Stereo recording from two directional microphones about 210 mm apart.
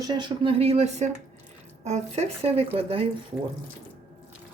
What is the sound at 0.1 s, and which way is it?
Speech, 25° right (ahead or behind).